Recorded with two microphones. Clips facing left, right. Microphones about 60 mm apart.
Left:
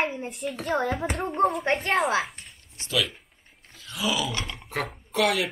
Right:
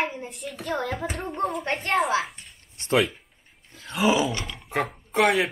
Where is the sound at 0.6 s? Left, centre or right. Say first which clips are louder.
Left 2 dB; centre.